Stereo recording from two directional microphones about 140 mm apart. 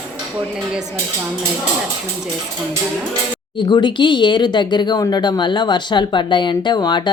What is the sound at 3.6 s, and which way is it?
Speech, 35° left (ahead or behind).